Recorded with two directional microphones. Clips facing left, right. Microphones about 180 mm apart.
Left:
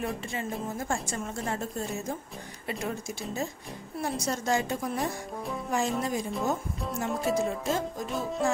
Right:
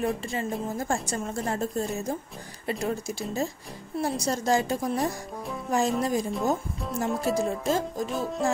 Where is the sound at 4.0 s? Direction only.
35° right (ahead or behind).